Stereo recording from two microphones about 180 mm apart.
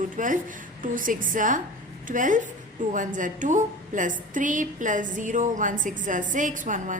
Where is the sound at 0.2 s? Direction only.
50° right (ahead or behind).